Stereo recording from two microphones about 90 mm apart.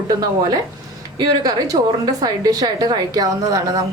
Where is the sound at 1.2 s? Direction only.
45° right (ahead or behind).